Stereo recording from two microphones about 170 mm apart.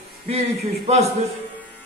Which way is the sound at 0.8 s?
40° right (ahead or behind).